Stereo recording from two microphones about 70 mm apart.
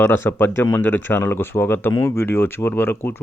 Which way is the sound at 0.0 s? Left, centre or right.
Left.